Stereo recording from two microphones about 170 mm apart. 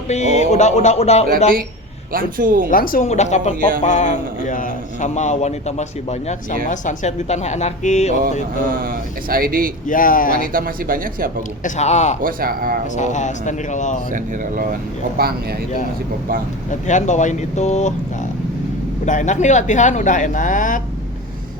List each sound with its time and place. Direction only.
0.1 s music: 40° left (ahead or behind)
2.1 s speech: 55° right (ahead or behind)
2.6 s a man's voice: 55° left (ahead or behind)
8.6 s speech: 55° right (ahead or behind)
9.8 s speech: 55° left (ahead or behind)
10.5 s speech: 55° right (ahead or behind)
11.6 s a man's voice: 40° left (ahead or behind)
12.2 s speech: 55° right (ahead or behind)
13.0 s a man's voice: 45° left (ahead or behind)
14.1 s speech: 50° right (ahead or behind)
15.2 s speech: 65° right (ahead or behind)
16.8 s a man's voice: 45° left (ahead or behind)
19.0 s a man's voice: 45° left (ahead or behind)